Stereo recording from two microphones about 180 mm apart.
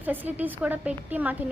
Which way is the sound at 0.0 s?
10° right (ahead or behind).